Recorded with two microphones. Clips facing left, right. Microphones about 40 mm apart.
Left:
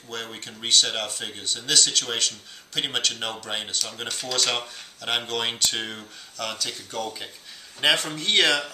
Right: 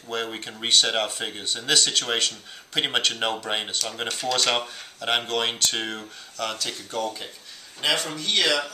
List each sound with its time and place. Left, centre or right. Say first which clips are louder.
0.1 s speech: right 5 dB; centre
7.8 s speech: left 3 dB; centre
8.2 s speech: left 3 dB; left